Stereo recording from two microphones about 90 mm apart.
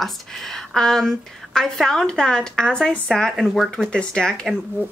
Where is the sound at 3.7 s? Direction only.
10° left (ahead or behind).